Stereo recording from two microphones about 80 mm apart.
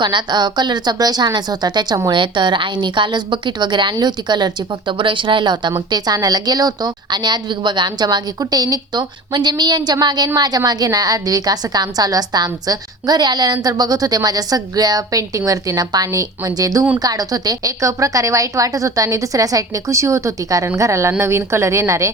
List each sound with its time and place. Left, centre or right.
0.0 s a woman's voice: right
2.0 s a woman's voice: right
5.9 s a woman's voice: right